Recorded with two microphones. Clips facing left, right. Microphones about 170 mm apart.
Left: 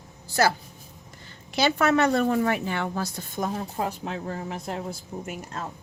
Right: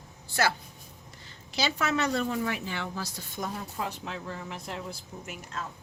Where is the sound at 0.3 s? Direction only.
40° left (ahead or behind).